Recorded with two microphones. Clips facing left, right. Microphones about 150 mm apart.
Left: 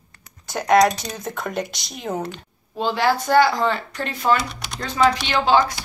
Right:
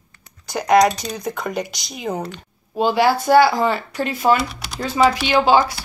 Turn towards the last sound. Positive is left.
turn(degrees=-5)  # may be behind; listen again after turning